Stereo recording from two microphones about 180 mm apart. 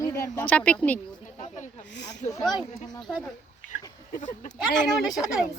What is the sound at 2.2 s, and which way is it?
Speech, 40° left (ahead or behind).